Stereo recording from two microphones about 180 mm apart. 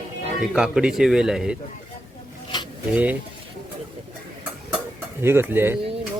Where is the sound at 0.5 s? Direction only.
5° right (ahead or behind).